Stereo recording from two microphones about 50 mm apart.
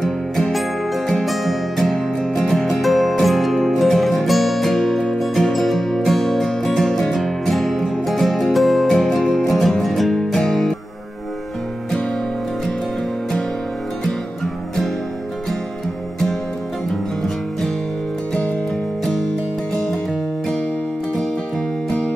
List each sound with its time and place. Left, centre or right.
0.0 s music: centre
14.0 s music: centre